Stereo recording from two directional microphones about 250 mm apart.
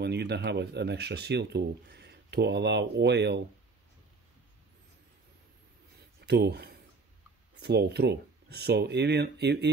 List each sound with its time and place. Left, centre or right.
0.0 s speech: right
6.2 s speech: right